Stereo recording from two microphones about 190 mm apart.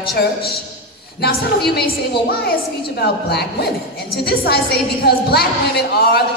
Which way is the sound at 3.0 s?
60° left (ahead or behind).